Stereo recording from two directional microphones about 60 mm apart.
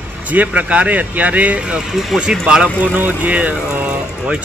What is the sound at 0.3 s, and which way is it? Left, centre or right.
Speech, right.